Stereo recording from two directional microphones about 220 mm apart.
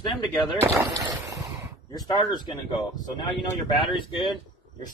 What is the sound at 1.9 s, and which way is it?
Speech, 20° left (ahead or behind).